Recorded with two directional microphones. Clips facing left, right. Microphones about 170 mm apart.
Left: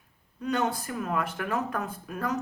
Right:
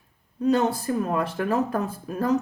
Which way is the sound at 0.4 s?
30° right (ahead or behind).